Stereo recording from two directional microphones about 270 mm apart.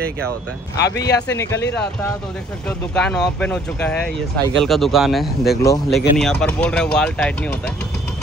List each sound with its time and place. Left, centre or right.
0.7 s speech: left
1.3 s speech: centre
2.9 s speech: centre